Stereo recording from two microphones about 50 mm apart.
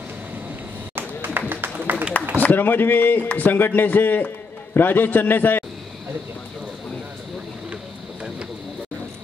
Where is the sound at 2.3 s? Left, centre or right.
Left.